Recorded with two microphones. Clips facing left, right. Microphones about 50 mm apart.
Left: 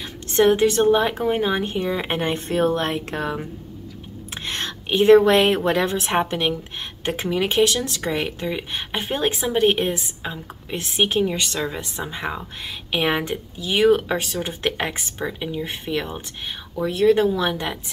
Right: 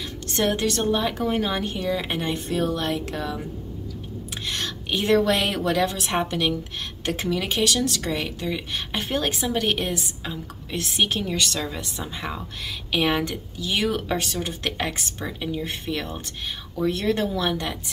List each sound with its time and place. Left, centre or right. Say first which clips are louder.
0.4 s speech: left 7 dB; left
4.5 s a woman's voice: left 3 dB; left
14.5 s speech: left 3 dB; left